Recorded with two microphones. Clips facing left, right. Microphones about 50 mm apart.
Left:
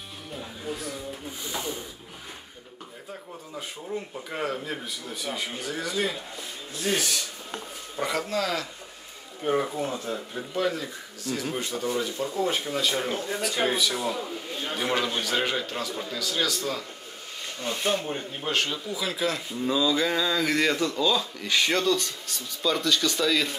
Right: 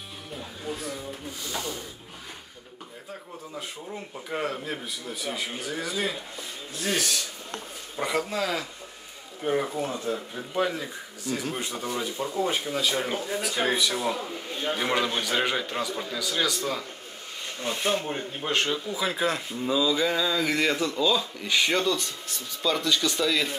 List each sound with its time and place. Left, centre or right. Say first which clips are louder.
0.3 s music: even; centre
1.4 s speech: left 1 dB; left
3.9 s a man's voice: left 1 dB; centre
7.0 s speech: even; centre
8.0 s speech: even; centre
9.4 s a man's voice: left 1 dB; centre
10.5 s a man's voice: even; centre
13.7 s speech: right 1 dB; right
14.2 s a man's voice: right 2 dB; centre
15.2 s speech: right 1 dB; centre
15.6 s speech: right 2 dB; centre
16.0 s a man's voice: left 1 dB; centre
17.6 s speech: even; right
19.6 s speech: even; centre